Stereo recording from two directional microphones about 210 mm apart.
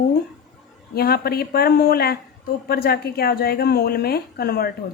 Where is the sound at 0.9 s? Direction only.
45° left (ahead or behind).